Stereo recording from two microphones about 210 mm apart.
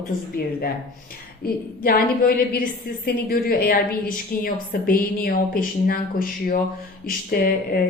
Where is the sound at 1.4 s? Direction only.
45° left (ahead or behind).